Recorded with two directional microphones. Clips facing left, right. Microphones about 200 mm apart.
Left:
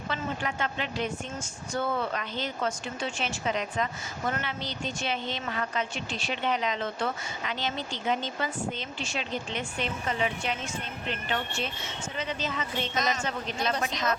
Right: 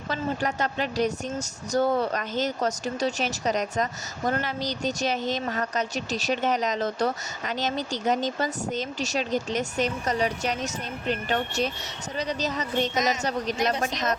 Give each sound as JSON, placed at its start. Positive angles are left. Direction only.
{"t": 0.1, "sound": "speech", "side_deg": -40}